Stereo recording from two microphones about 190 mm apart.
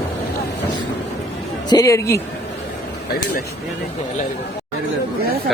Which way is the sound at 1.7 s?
15° left (ahead or behind).